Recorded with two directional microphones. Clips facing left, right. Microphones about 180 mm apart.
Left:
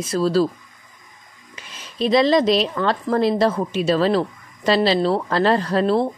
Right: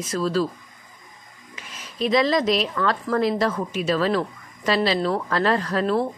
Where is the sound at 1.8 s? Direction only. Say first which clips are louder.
Left 3 dB; 30° left (ahead or behind).